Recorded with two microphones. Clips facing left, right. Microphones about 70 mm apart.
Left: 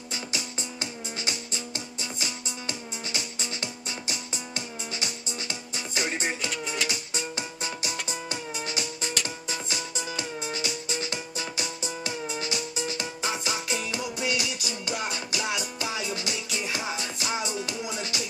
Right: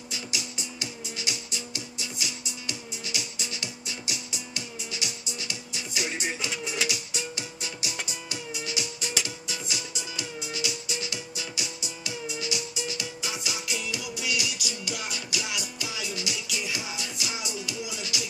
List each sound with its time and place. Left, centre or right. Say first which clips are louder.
0.1 s music: left 2 dB; left
6.4 s music: even; centre
6.9 s music: left 1 dB; left